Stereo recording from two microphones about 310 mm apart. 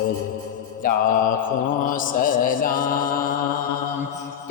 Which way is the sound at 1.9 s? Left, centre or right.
Left.